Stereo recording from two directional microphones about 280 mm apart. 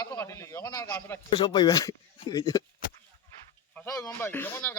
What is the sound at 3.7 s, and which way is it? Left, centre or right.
A man's voice, centre.